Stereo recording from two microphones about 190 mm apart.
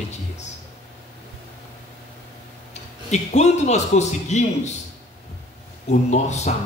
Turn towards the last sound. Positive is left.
turn(degrees=35)  # may be behind; listen again after turning